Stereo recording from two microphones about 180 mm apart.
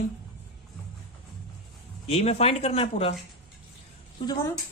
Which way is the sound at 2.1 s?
35° left (ahead or behind).